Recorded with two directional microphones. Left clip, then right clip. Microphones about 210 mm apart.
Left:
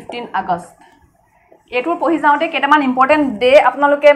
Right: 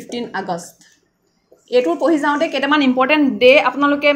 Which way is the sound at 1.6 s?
40° right (ahead or behind).